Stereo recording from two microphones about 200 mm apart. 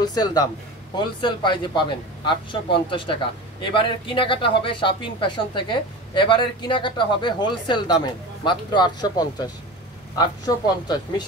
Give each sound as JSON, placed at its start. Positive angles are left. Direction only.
{"t": 0.0, "sound": "speech", "side_deg": 20}